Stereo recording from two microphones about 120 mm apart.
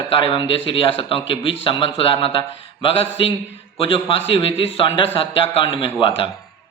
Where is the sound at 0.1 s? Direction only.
45° left (ahead or behind).